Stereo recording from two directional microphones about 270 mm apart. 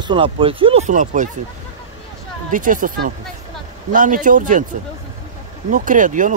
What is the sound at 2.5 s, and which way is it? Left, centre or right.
Speech, right.